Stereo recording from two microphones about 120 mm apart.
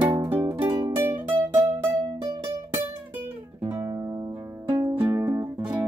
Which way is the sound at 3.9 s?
30° right (ahead or behind).